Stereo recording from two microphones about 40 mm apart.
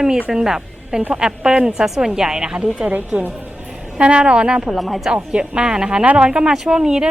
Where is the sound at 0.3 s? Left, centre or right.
Centre.